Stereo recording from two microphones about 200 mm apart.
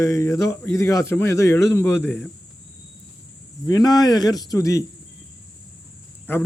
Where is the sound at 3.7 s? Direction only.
20° left (ahead or behind).